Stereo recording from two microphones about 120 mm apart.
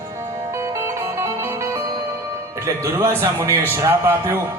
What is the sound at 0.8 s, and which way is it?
Music, 20° right (ahead or behind).